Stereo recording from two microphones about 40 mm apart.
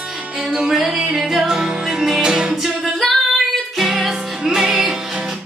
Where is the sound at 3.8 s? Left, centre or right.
Centre.